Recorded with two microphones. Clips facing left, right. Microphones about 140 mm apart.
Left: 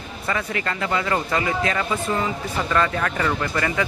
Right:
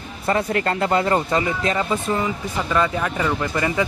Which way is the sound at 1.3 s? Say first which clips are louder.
Right 2 dB; 25° right (ahead or behind).